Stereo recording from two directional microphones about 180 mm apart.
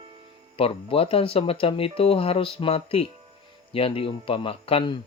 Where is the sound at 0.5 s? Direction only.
30° left (ahead or behind).